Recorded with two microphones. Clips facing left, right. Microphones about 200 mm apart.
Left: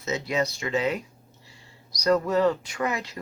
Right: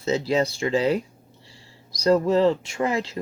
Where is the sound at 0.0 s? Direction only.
30° right (ahead or behind).